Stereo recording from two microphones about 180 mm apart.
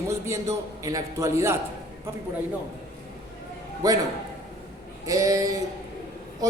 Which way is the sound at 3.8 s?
20° right (ahead or behind).